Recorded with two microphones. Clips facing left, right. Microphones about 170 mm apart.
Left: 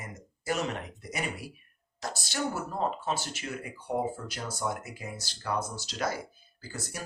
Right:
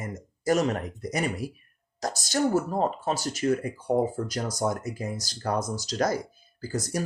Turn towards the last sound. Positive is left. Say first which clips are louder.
# right 10 dB
turn(degrees=-40)  # may be behind; listen again after turning